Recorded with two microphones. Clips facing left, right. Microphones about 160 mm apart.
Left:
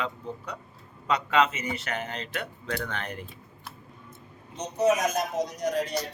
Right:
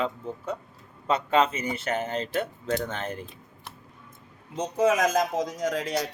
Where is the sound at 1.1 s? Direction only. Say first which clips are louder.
Right 1 dB; 30° right (ahead or behind).